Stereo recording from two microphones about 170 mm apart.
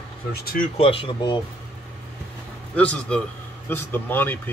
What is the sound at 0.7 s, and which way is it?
Speech, 30° left (ahead or behind).